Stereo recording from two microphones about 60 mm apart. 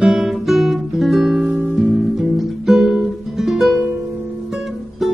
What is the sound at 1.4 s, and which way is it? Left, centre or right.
Music, right.